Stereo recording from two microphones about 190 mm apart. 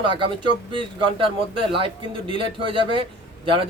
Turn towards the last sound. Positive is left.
turn(degrees=-30)  # may be behind; listen again after turning